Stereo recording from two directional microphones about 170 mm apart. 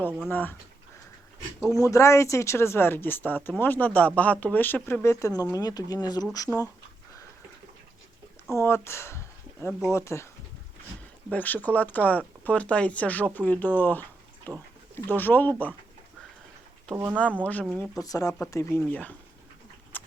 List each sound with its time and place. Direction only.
0.3 s speech: 10° left (ahead or behind)
1.6 s speech: 20° left (ahead or behind)
6.5 s speech: centre (ahead or behind)
8.5 s speech: 15° left (ahead or behind)
11.3 s speech: 10° left (ahead or behind)
16.9 s speech: 10° right (ahead or behind)
17.4 s speech: 10° left (ahead or behind)
18.0 s speech: 20° left (ahead or behind)
18.9 s speech: 10° left (ahead or behind)
19.9 s clip-clop: 10° left (ahead or behind)